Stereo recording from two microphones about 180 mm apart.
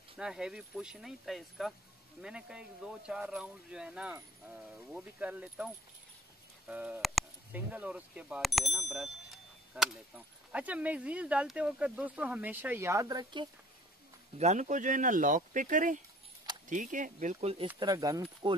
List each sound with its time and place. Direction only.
0.2 s speech: 5° right (ahead or behind); by 13.5 s 25° right (ahead or behind)
14.4 s speech: 40° right (ahead or behind)
17.7 s speech: 20° right (ahead or behind)